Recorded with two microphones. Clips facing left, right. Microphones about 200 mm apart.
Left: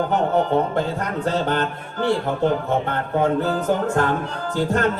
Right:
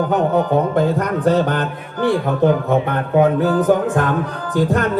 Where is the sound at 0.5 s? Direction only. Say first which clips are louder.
Right 5 dB; 15° right (ahead or behind).